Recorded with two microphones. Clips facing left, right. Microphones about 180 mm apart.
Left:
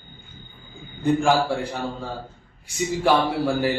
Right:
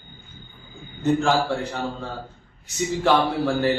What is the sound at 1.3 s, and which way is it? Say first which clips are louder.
Speech: left 1 dB; 10° left (ahead or behind).